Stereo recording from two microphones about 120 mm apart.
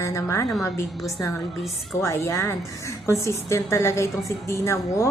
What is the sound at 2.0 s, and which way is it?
A woman's voice, 25° left (ahead or behind).